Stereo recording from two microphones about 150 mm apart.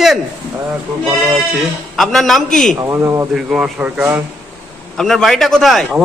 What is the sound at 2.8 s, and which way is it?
Speech, 20° right (ahead or behind).